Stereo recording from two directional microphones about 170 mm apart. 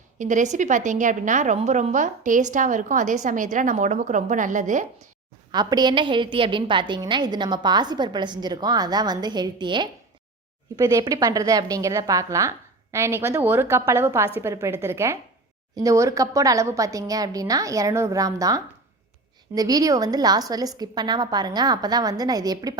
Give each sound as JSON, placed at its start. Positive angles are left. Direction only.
{"t": 0.2, "sound": "a woman's voice", "side_deg": -45}
{"t": 5.5, "sound": "a woman's voice", "side_deg": -25}